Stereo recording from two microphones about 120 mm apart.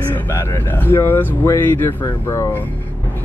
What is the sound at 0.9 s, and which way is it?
Speech, 20° left (ahead or behind).